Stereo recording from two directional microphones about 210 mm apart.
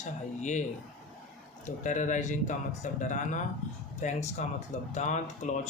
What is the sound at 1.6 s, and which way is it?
Speech, 35° left (ahead or behind).